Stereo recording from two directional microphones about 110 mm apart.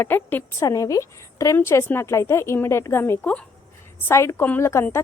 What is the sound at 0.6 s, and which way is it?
A woman's voice, 30° left (ahead or behind).